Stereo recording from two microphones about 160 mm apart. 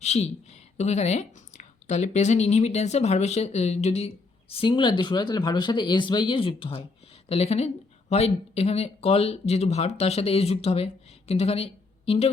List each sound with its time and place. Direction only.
0.0 s speech: 45° left (ahead or behind)